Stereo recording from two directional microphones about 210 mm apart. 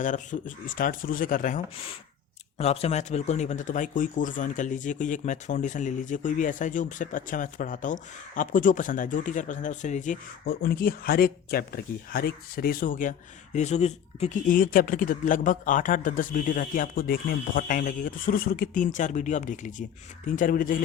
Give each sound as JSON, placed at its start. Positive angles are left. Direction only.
{"t": 0.0, "sound": "speech", "side_deg": 35}